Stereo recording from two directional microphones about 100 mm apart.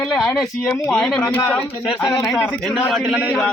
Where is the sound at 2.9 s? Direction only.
5° right (ahead or behind).